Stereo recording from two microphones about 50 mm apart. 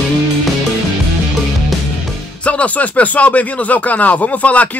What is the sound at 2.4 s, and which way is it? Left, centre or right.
Speech, left.